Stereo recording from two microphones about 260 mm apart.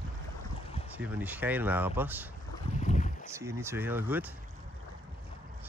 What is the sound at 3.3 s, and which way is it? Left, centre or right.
Speech, centre.